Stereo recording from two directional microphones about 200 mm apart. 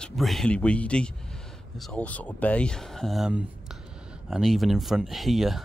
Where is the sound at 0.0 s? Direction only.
Centre (ahead or behind).